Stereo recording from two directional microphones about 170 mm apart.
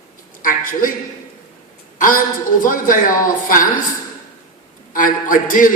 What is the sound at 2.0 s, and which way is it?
A man's voice, 55° left (ahead or behind).